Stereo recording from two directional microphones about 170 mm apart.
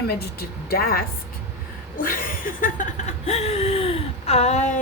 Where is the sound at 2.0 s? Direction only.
55° left (ahead or behind).